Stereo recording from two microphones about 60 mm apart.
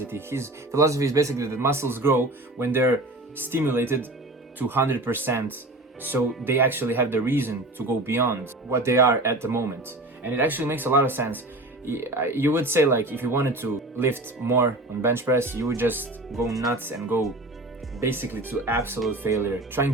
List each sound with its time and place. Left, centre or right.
0.0 s speech: right
1.5 s speech: right
10.2 s speech: right